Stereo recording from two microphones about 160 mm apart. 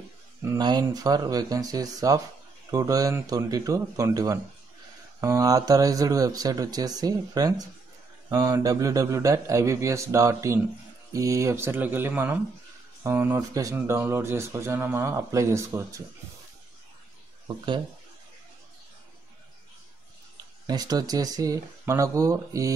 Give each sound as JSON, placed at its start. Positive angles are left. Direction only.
{"t": 0.4, "sound": "speech", "side_deg": -25}
{"t": 20.6, "sound": "speech", "side_deg": -25}